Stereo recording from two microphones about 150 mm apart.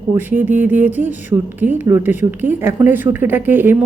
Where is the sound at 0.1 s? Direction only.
15° right (ahead or behind).